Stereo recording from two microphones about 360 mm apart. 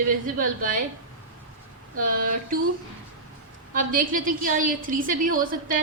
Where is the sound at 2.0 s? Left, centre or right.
Right.